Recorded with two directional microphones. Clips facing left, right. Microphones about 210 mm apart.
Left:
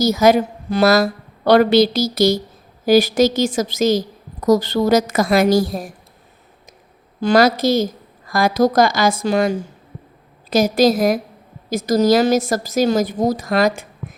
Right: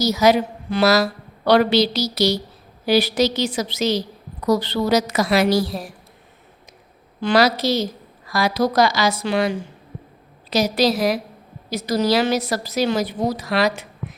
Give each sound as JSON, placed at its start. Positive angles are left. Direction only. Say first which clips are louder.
{"t": 0.0, "sound": "a woman's voice", "louder": "left 3 dB", "side_deg": 50}
{"t": 7.2, "sound": "a woman's voice", "louder": "left 3 dB", "side_deg": 45}